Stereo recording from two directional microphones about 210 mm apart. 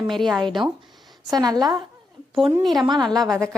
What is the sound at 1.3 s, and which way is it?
Speech, 20° right (ahead or behind).